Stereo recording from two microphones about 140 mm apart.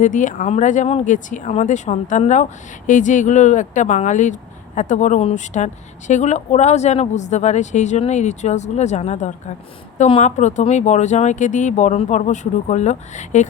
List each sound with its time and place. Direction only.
0.0 s speech: 65° left (ahead or behind)